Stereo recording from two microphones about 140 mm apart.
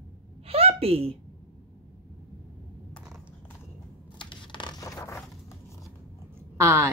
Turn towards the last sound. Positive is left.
turn(degrees=-20)  # may be behind; listen again after turning